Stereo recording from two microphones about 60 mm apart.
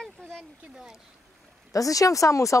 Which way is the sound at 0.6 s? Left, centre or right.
Centre.